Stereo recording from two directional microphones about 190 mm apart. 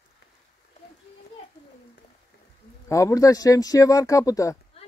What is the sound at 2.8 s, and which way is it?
Speech, 15° left (ahead or behind).